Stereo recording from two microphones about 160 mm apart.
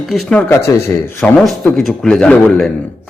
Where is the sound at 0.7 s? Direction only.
20° left (ahead or behind).